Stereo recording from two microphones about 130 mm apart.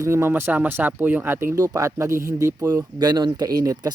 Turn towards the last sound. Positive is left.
turn(degrees=-30)  # may be behind; listen again after turning